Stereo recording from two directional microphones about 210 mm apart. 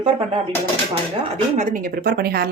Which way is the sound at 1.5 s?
40° right (ahead or behind).